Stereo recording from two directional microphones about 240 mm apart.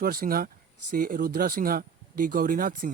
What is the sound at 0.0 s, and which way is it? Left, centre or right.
Speech, right.